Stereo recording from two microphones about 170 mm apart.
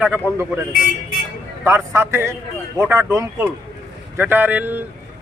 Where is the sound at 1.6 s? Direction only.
15° right (ahead or behind).